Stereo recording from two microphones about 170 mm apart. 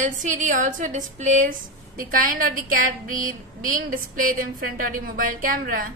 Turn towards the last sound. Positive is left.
turn(degrees=-55)  # may be behind; listen again after turning